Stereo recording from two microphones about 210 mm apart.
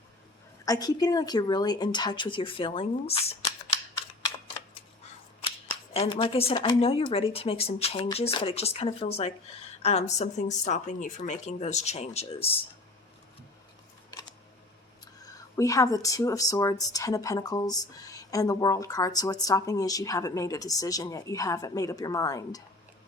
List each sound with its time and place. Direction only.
0.6 s a woman's voice: 15° left (ahead or behind)
5.9 s a woman's voice: 25° left (ahead or behind)
15.0 s speech: 15° left (ahead or behind)